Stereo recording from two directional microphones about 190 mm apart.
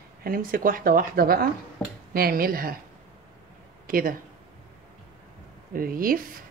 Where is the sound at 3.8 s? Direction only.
50° right (ahead or behind).